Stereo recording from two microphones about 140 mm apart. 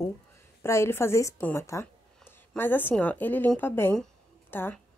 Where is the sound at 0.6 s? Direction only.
20° left (ahead or behind).